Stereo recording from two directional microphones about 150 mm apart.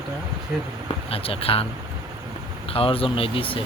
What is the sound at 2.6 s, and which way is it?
Speech, 40° left (ahead or behind).